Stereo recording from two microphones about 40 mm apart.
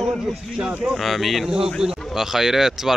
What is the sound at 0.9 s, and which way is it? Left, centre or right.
Speech, centre.